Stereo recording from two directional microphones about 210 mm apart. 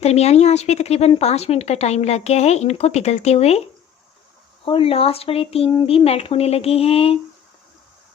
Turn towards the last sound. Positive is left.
turn(degrees=30)  # may be behind; listen again after turning